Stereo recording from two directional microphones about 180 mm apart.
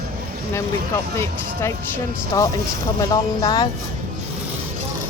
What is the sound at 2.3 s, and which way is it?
Speech, 20° left (ahead or behind).